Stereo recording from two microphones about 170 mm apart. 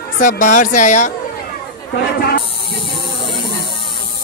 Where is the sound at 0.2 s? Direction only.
55° left (ahead or behind).